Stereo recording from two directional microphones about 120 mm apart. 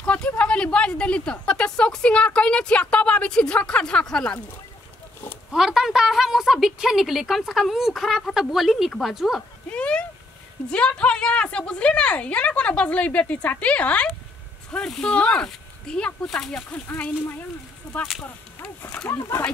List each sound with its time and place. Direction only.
0.0 s a sound: 10° left (ahead or behind)
0.4 s a woman's voice: 10° left (ahead or behind)
5.5 s a woman's voice: 5° right (ahead or behind)
9.7 s a sound: 10° left (ahead or behind)
10.7 s a woman's voice: 10° left (ahead or behind)
19.0 s speech: 20° left (ahead or behind)